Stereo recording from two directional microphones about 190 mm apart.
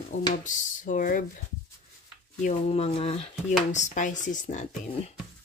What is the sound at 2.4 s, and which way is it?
Speech, 35° left (ahead or behind).